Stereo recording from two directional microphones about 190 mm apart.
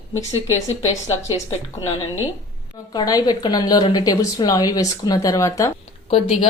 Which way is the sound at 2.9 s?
20° left (ahead or behind).